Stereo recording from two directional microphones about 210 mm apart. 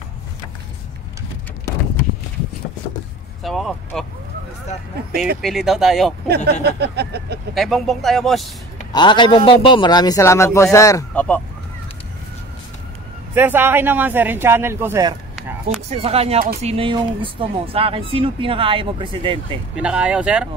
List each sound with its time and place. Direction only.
3.4 s speech: centre (ahead or behind)
5.4 s speech: centre (ahead or behind)
6.2 s speech: 50° right (ahead or behind)
7.5 s speech: centre (ahead or behind)
8.9 s a man's voice: 20° left (ahead or behind)
13.3 s speech: 10° right (ahead or behind)
15.3 s a sound: centre (ahead or behind)
15.9 s speech: 30° right (ahead or behind)
19.7 s speech: 5° right (ahead or behind)